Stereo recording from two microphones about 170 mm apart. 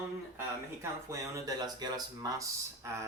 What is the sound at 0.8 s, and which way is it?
Speech, 20° right (ahead or behind).